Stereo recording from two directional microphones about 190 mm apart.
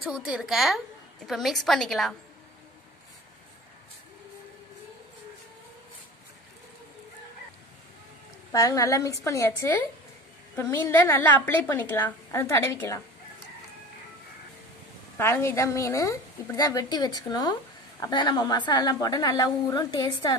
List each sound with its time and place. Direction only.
0.0 s a woman's voice: 5° right (ahead or behind)
8.5 s a woman's voice: 15° left (ahead or behind)
15.1 s a woman's voice: 10° left (ahead or behind)